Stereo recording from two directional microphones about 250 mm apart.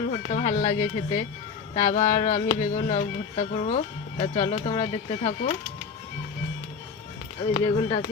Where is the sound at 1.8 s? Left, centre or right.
Left.